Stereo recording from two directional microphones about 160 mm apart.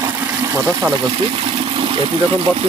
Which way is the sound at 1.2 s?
35° right (ahead or behind).